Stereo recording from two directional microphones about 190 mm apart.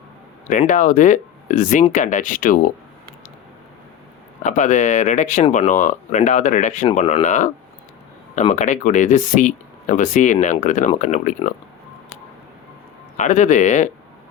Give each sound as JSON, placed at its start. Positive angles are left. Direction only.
{"t": 0.5, "sound": "speech", "side_deg": 40}
{"t": 4.4, "sound": "speech", "side_deg": 40}
{"t": 13.1, "sound": "speech", "side_deg": 40}